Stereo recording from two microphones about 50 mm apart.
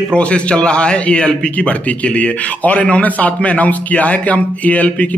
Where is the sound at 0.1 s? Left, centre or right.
Left.